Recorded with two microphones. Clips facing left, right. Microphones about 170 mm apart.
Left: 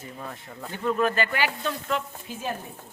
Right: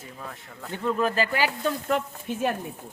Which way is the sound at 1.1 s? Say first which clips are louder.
Right 1 dB; 30° right (ahead or behind).